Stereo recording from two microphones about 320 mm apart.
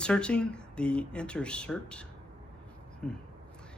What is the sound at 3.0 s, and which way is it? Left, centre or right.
Speech, centre.